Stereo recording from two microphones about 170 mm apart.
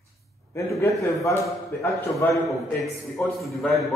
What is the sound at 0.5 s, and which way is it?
A man's voice, 15° left (ahead or behind).